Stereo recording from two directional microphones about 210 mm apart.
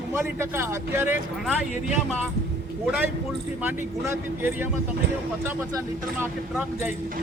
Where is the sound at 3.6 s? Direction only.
10° right (ahead or behind).